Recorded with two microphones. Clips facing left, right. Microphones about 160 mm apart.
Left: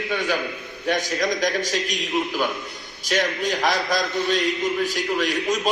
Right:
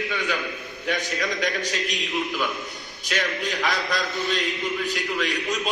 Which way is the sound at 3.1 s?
40° left (ahead or behind).